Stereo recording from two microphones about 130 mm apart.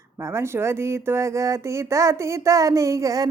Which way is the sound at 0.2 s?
20° right (ahead or behind).